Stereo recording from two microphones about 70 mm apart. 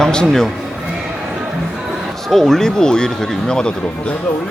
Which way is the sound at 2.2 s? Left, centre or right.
Centre.